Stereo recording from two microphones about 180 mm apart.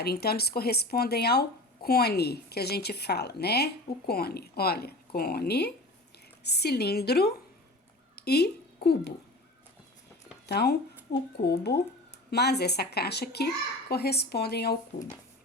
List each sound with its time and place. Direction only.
0.0 s speech: 60° left (ahead or behind)
10.4 s speech: 65° left (ahead or behind)